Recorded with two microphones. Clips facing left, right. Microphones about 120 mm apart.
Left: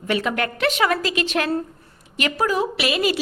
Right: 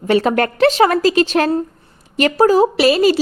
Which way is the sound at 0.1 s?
35° right (ahead or behind).